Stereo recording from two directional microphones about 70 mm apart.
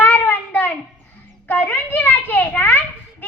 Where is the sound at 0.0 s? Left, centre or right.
Left.